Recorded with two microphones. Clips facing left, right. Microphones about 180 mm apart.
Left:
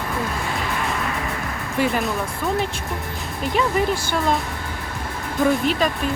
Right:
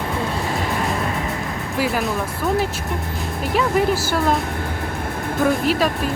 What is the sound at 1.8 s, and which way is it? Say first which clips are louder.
Speech: even; centre (ahead or behind).